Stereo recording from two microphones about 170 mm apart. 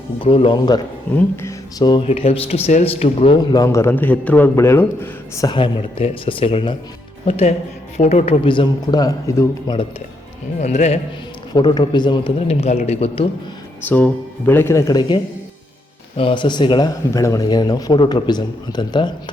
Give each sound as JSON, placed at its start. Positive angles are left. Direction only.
{"t": 0.2, "sound": "a man's voice", "side_deg": 30}
{"t": 2.0, "sound": "a man's voice", "side_deg": 35}
{"t": 3.3, "sound": "a man's voice", "side_deg": 20}
{"t": 5.5, "sound": "a man's voice", "side_deg": 30}
{"t": 10.6, "sound": "a man's voice", "side_deg": 40}
{"t": 11.5, "sound": "a man's voice", "side_deg": 25}
{"t": 13.8, "sound": "a man's voice", "side_deg": 10}